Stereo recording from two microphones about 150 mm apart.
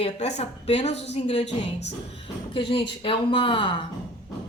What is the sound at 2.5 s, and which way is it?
Speech, 35° left (ahead or behind).